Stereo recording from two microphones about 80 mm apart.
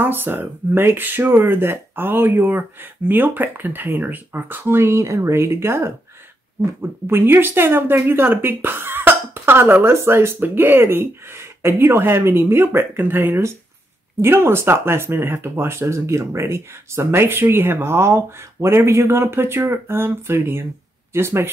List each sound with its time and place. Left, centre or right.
0.0 s speech: right